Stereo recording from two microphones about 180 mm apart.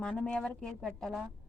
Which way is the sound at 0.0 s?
5° left (ahead or behind).